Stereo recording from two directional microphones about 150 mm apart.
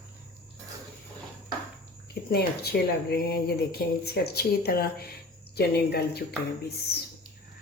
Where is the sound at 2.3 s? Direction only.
90° left.